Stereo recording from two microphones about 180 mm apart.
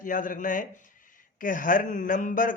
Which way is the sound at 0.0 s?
50° left (ahead or behind).